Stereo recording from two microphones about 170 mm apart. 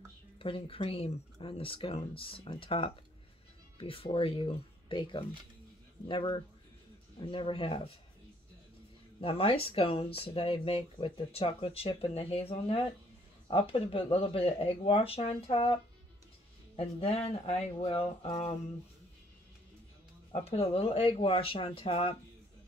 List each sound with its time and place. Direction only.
0.4 s speech: 30° left (ahead or behind)
9.2 s speech: 35° left (ahead or behind)
20.4 s speech: 35° left (ahead or behind)